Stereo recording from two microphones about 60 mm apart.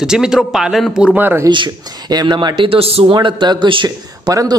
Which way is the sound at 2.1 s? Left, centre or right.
Right.